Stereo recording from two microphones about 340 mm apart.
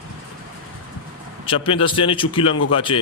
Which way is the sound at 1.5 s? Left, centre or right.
Centre.